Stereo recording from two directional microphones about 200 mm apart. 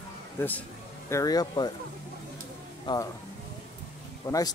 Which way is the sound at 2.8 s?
20° left (ahead or behind).